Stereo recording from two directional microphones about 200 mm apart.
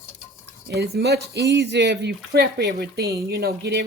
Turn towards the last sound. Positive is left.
turn(degrees=-55)  # may be behind; listen again after turning